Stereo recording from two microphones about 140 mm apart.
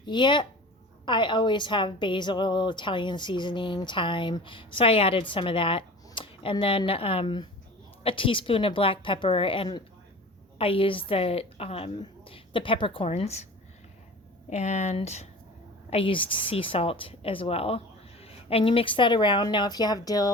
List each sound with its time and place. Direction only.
0.0 s a woman's voice: 35° left (ahead or behind); by 13.5 s 50° left (ahead or behind)
14.5 s a woman's voice: 55° left (ahead or behind)
15.9 s a woman's voice: 40° left (ahead or behind)